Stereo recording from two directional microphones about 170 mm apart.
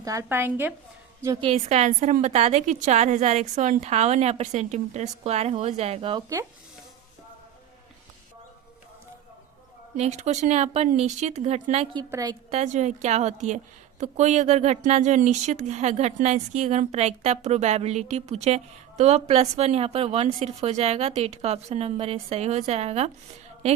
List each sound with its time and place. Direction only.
0.0 s a woman's voice: 20° right (ahead or behind)
1.4 s speech: 35° right (ahead or behind)
10.0 s speech: 40° right (ahead or behind)
12.1 s a woman's voice: 20° right (ahead or behind)
12.5 s a woman's voice: 40° right (ahead or behind)